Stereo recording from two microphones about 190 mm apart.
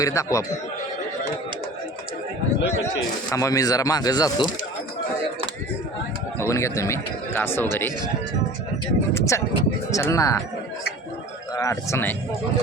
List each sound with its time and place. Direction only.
0.0 s speech: 15° left (ahead or behind)
3.3 s speech: 15° left (ahead or behind)
6.5 s speech: 15° left (ahead or behind)
9.1 s speech: 15° left (ahead or behind)
11.5 s speech: 15° left (ahead or behind)